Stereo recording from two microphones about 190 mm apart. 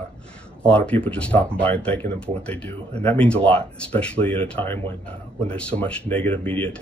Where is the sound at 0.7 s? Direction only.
5° left (ahead or behind).